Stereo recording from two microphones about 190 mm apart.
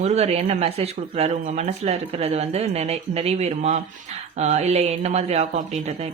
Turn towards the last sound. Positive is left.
turn(degrees=-35)  # may be behind; listen again after turning